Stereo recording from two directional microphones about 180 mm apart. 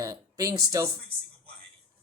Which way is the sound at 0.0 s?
20° right (ahead or behind).